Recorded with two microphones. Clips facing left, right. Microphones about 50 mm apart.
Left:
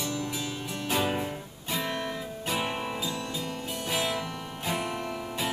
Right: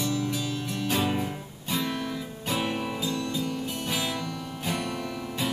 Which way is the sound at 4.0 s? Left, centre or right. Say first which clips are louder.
Even; left.